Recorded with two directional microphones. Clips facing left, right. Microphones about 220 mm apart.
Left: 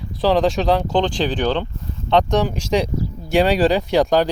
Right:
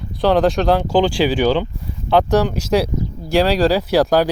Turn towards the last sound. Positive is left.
turn(degrees=-5)  # may be behind; listen again after turning